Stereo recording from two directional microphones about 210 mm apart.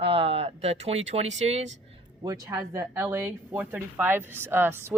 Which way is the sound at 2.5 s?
15° right (ahead or behind).